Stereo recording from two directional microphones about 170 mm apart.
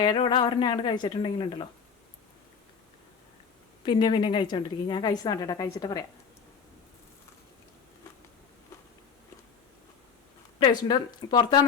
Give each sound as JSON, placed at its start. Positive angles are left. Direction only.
{"t": 0.0, "sound": "a woman's voice", "side_deg": 25}
{"t": 3.8, "sound": "a woman's voice", "side_deg": 30}
{"t": 10.6, "sound": "a woman's voice", "side_deg": 25}